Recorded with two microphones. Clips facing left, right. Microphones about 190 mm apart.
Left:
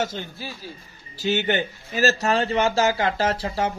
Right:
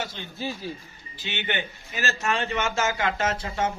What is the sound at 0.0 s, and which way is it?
A man's voice, 45° left (ahead or behind).